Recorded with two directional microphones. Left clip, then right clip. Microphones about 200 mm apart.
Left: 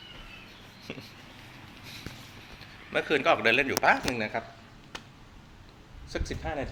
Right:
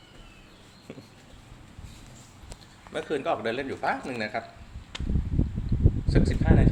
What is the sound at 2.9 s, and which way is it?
A man's voice, 10° right (ahead or behind).